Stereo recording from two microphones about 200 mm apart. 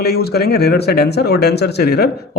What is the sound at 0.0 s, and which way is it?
Speech, 50° left (ahead or behind).